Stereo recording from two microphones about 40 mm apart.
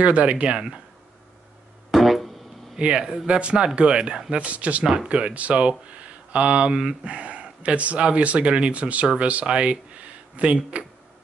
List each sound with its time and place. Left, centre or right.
0.0 s speech: right
1.9 s music: centre
2.8 s speech: centre